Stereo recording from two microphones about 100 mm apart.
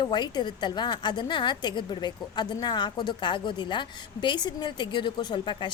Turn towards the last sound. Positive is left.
turn(degrees=50)  # may be behind; listen again after turning